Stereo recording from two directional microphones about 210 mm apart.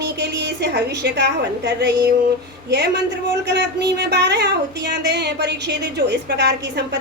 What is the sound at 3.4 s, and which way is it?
A woman's voice, 55° right (ahead or behind).